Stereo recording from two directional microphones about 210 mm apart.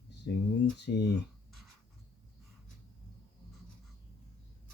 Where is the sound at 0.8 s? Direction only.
50° left (ahead or behind).